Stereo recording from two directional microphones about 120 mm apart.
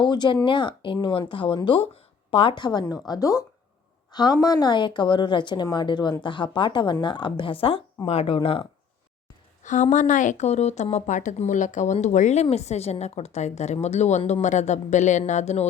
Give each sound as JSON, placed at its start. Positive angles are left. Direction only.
{"t": 0.0, "sound": "a woman's voice", "side_deg": 40}
{"t": 9.6, "sound": "a woman's voice", "side_deg": 90}
{"t": 10.9, "sound": "a woman's voice", "side_deg": 80}
{"t": 15.3, "sound": "speech", "side_deg": 75}